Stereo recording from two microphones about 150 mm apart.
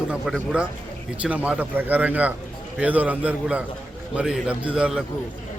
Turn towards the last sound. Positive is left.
turn(degrees=-5)  # may be behind; listen again after turning